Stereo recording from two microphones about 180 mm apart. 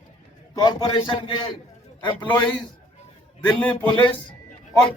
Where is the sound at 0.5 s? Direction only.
20° left (ahead or behind).